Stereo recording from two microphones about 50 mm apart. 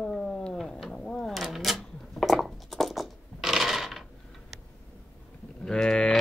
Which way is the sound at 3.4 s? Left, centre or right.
Centre.